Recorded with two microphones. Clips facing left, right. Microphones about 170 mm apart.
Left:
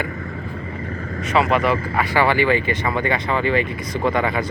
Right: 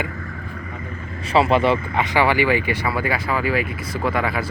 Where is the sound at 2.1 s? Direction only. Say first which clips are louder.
Left 1 dB; 15° right (ahead or behind).